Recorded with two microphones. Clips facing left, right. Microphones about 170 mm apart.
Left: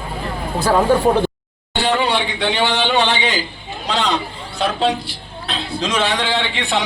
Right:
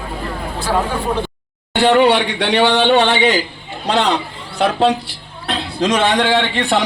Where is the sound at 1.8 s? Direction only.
65° right (ahead or behind).